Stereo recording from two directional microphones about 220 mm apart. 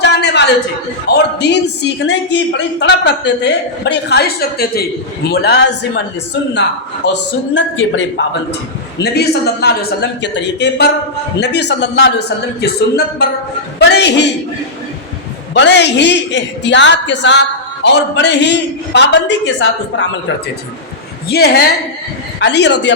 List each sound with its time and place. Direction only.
0.0 s a sound: 50° left (ahead or behind)
1.0 s a man's voice: 50° left (ahead or behind)
7.0 s a man's voice: 55° left (ahead or behind)
13.8 s a man's voice: 50° left (ahead or behind)
15.5 s a man's voice: 50° left (ahead or behind)
21.2 s a man's voice: 45° left (ahead or behind)